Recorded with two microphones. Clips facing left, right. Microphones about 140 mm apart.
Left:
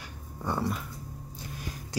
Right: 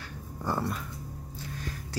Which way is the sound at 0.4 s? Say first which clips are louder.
Even; centre (ahead or behind).